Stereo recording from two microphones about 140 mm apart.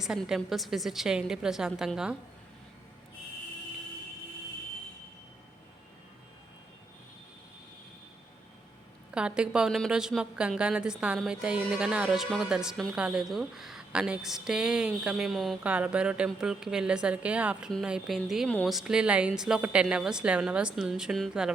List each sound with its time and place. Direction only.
0.0 s a woman's voice: 5° right (ahead or behind)
9.1 s a woman's voice: 5° right (ahead or behind)